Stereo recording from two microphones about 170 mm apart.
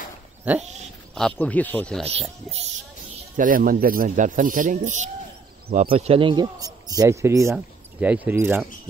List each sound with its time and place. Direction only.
0.5 s dog: 10° right (ahead or behind)
1.1 s speech: 5° left (ahead or behind)
3.3 s speech: 55° right (ahead or behind); by 8.6 s 10° right (ahead or behind)